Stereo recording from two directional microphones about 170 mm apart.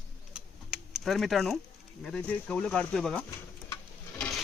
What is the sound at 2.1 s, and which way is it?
Speech, 5° left (ahead or behind).